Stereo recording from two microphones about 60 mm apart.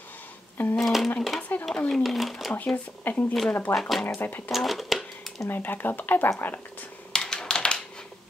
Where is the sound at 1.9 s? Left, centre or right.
Centre.